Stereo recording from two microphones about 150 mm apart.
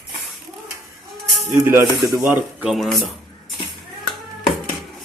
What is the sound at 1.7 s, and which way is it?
Speech, 15° right (ahead or behind).